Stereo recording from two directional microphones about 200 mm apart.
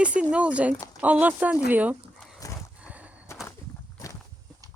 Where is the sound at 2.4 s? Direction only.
15° left (ahead or behind).